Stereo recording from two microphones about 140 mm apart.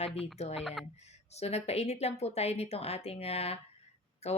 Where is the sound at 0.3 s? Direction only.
50° left (ahead or behind).